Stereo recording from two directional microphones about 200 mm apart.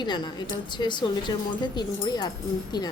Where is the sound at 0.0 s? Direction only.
20° left (ahead or behind).